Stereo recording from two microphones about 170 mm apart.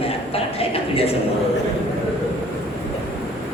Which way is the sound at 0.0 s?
35° left (ahead or behind).